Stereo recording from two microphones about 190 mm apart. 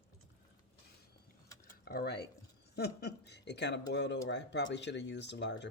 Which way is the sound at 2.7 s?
60° left (ahead or behind).